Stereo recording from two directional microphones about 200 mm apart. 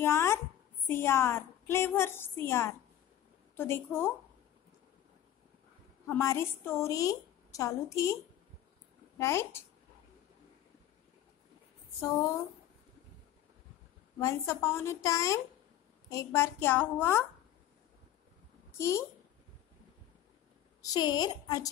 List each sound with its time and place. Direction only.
0.0 s a woman's voice: 10° left (ahead or behind)
6.0 s a woman's voice: 15° left (ahead or behind)
9.2 s a woman's voice: 15° left (ahead or behind)
14.2 s a woman's voice: 15° left (ahead or behind)
18.8 s a woman's voice: 15° left (ahead or behind)
20.8 s a woman's voice: 20° left (ahead or behind)